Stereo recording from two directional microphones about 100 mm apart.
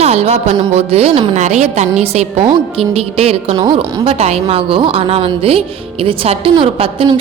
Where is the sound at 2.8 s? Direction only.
80° right.